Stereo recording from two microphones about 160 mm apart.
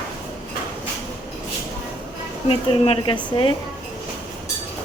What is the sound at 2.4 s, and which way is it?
Speech, 35° left (ahead or behind).